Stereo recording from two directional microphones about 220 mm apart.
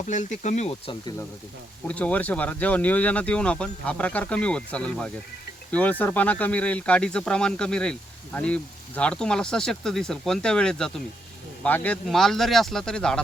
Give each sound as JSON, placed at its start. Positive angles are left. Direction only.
{"t": 0.0, "sound": "speech", "side_deg": 35}
{"t": 1.9, "sound": "speech", "side_deg": 5}